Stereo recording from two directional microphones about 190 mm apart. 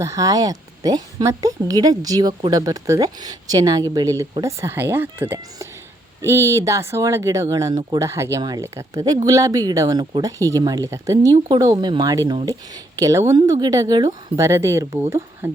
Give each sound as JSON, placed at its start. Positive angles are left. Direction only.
{"t": 0.0, "sound": "speech", "side_deg": -15}